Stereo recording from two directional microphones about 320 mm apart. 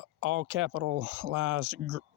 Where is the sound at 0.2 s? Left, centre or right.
Right.